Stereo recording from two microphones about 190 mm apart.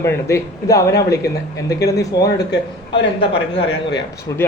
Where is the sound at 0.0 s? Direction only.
15° left (ahead or behind).